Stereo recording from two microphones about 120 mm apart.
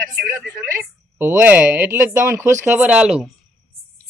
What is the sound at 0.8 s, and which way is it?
Speech, 20° right (ahead or behind).